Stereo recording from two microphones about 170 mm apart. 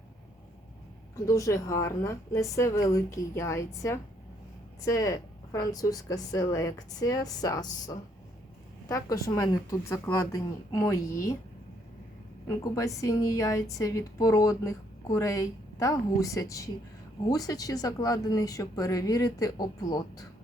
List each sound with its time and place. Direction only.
1.3 s a woman's voice: 20° left (ahead or behind)
12.5 s a woman's voice: 20° left (ahead or behind)